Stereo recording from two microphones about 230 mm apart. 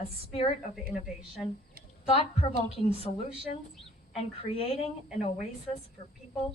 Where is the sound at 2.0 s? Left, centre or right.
Left.